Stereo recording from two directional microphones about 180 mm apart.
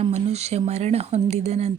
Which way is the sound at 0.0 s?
35° right (ahead or behind).